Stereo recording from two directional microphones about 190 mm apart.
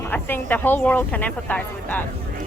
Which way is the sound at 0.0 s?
10° left (ahead or behind).